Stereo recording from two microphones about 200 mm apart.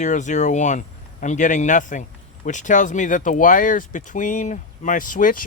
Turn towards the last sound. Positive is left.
turn(degrees=40)  # may be behind; listen again after turning